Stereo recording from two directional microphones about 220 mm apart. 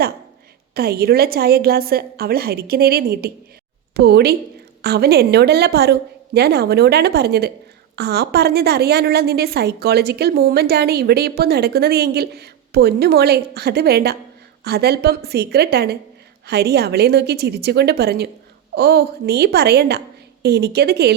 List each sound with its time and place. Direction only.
0.7 s a woman's voice: 45° right (ahead or behind)